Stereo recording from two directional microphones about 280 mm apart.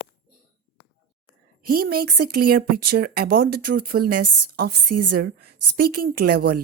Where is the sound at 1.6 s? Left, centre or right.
Right.